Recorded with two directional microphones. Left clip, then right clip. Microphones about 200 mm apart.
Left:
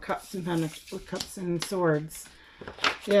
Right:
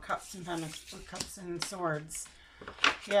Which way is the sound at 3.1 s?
35° left (ahead or behind).